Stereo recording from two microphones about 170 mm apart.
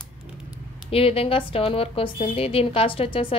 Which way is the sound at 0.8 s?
35° left (ahead or behind).